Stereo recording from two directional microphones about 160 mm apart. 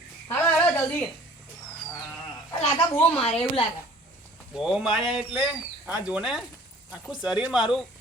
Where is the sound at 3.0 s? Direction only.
35° left (ahead or behind).